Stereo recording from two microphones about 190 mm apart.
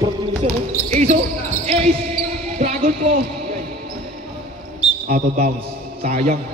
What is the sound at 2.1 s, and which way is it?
Basketball bounce, 40° right (ahead or behind).